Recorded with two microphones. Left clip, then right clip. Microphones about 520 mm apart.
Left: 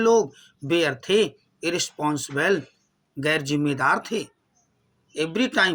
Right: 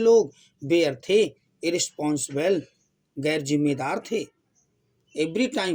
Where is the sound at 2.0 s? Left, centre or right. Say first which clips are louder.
Left 2 dB; centre.